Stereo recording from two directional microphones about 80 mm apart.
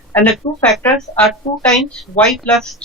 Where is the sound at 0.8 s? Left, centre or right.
Left.